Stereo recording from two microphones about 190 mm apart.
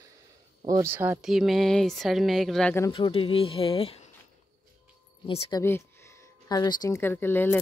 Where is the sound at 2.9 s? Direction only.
30° left (ahead or behind).